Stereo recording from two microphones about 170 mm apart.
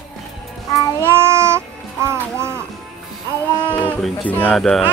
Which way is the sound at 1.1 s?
15° right (ahead or behind).